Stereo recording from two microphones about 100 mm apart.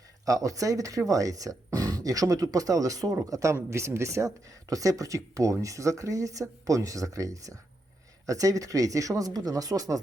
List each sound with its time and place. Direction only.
0.3 s speech: 35° right (ahead or behind)